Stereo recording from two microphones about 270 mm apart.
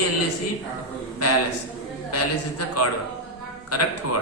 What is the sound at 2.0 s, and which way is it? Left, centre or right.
A man's voice, left.